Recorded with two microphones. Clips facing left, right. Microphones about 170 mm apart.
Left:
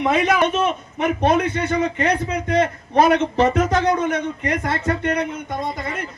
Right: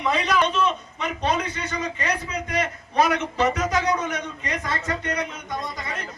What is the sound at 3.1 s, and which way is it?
Speech, 30° left (ahead or behind).